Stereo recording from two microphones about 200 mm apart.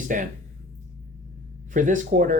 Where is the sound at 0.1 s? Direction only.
40° right (ahead or behind).